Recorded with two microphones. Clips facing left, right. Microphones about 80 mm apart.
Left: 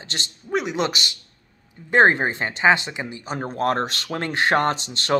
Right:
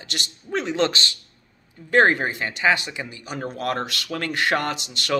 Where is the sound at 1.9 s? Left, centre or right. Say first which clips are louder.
Left 1 dB; left.